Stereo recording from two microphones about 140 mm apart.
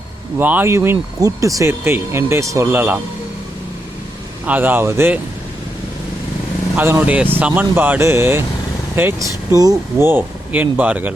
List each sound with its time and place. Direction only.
0.3 s speech: 15° right (ahead or behind)
4.4 s speech: 10° right (ahead or behind)
6.7 s speech: 15° right (ahead or behind)